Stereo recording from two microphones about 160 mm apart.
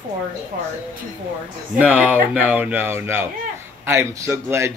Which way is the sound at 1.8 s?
10° right (ahead or behind).